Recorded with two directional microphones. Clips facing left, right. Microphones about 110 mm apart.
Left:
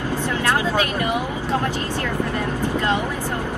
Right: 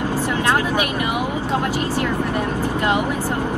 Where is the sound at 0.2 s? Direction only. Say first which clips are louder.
Right 1 dB; 15° right (ahead or behind).